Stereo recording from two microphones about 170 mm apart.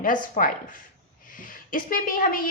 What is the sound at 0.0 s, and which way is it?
A woman's voice, 50° left (ahead or behind).